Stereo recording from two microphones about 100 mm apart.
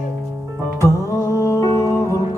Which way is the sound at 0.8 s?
30° left (ahead or behind).